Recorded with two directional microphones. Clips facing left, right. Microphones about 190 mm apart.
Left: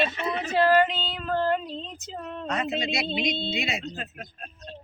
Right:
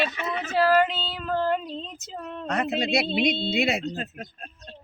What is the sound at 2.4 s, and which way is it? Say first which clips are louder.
Speech: right 3 dB; 60° right (ahead or behind).